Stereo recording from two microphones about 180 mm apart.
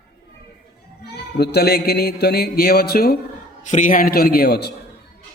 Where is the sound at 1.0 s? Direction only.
65° left (ahead or behind).